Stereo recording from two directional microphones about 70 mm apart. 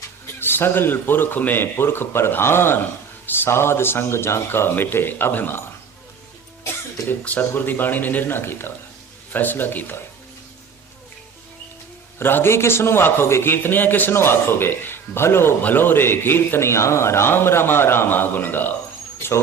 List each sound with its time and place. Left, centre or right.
0.3 s a man's voice: left
7.1 s speech: left
12.2 s a man's voice: left